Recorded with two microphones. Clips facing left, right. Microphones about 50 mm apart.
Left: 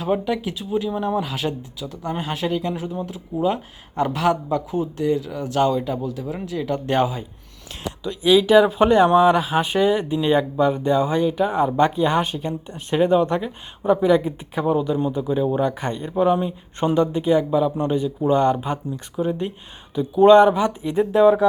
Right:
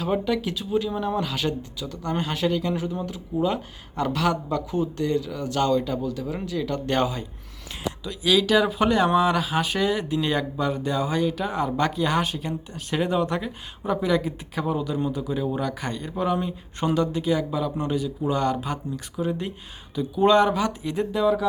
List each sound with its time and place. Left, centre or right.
0.1 s speech: centre
4.7 s speech: centre
20.3 s speech: centre
21.1 s speech: left